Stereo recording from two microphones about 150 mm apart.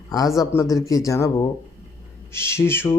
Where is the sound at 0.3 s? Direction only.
25° left (ahead or behind).